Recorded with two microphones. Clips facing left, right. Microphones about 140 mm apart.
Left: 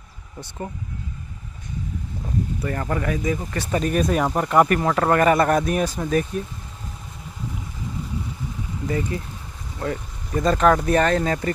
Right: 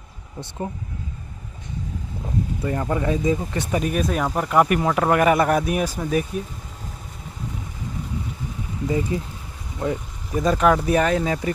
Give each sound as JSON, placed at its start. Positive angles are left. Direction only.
{"t": 2.6, "sound": "speech", "side_deg": -15}
{"t": 8.8, "sound": "speech", "side_deg": -15}